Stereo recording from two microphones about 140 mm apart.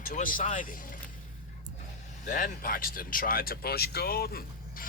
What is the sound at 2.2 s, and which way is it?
Speech, 70° left (ahead or behind).